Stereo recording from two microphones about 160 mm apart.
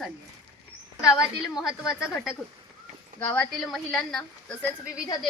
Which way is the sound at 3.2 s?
10° left (ahead or behind).